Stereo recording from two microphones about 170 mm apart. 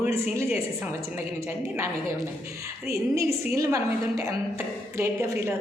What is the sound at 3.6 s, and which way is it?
A woman's voice, 20° right (ahead or behind).